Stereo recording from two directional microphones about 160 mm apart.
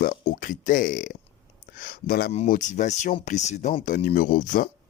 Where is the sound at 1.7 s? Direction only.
70° left (ahead or behind).